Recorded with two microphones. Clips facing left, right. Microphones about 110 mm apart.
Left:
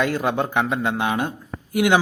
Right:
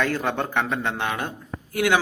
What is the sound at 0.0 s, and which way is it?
Speech, 15° left (ahead or behind).